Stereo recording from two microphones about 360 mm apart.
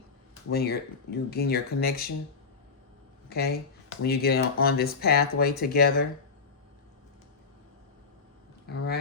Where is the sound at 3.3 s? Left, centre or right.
Left.